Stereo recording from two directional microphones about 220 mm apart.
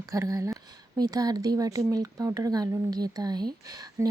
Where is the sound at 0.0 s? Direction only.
15° right (ahead or behind).